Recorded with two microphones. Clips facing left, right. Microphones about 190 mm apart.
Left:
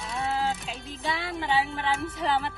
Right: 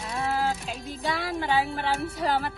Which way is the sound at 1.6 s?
35° right (ahead or behind).